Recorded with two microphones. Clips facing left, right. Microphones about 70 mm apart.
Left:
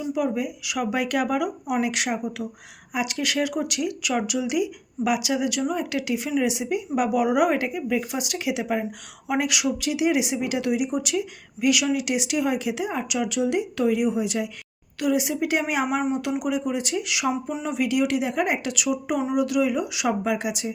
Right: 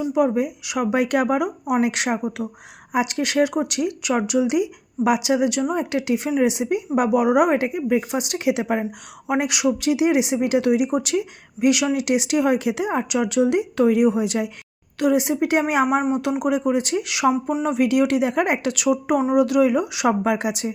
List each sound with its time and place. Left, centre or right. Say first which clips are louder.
0.1 s speech: right 5 dB; right
9.2 s speech: right 3 dB; right
11.6 s speech: right 3 dB; right
12.0 s speech: right 5 dB; right
14.9 s speech: right 4 dB; right